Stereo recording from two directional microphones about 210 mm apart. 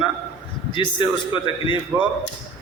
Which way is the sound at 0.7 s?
20° left (ahead or behind).